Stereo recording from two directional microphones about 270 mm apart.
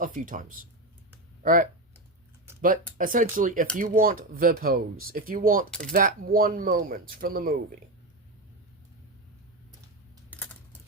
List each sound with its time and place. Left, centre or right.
0.0 s speech: right
3.0 s speech: right
10.2 s typing: centre